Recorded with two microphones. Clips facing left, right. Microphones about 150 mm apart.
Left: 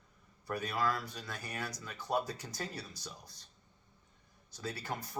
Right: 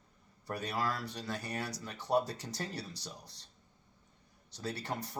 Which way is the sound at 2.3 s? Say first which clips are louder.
Right 1 dB; 35° right (ahead or behind).